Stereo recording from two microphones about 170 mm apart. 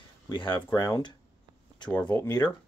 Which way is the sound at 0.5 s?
20° left (ahead or behind).